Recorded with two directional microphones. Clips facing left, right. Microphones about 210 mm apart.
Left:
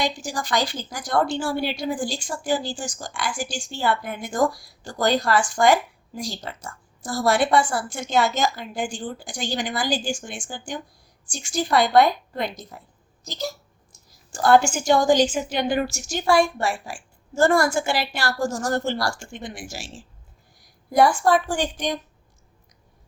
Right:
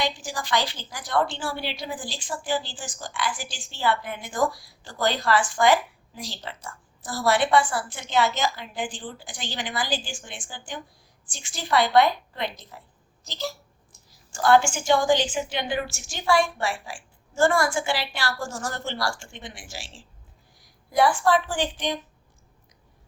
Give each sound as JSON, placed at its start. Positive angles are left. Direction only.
{"t": 0.0, "sound": "a woman's voice", "side_deg": 40}
{"t": 20.9, "sound": "a woman's voice", "side_deg": 45}